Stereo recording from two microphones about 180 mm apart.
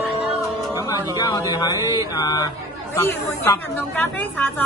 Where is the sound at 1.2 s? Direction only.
20° left (ahead or behind).